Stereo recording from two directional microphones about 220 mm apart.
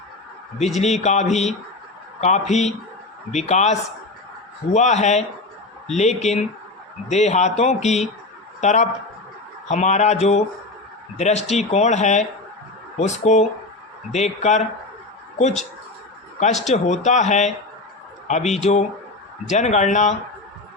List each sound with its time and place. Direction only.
0.6 s speech: 30° left (ahead or behind)
16.6 s speech: 30° left (ahead or behind)